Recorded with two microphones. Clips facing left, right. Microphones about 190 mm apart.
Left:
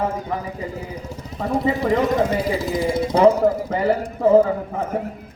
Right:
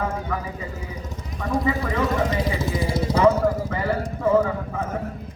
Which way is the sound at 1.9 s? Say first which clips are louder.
Left 8 dB; 45° left (ahead or behind).